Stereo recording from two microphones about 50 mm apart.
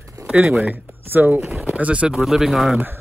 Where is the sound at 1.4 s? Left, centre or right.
Centre.